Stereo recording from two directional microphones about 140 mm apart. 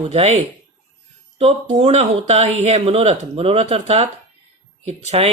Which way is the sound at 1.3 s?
45° right (ahead or behind).